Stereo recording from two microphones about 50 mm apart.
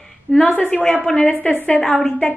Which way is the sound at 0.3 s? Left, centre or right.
Left.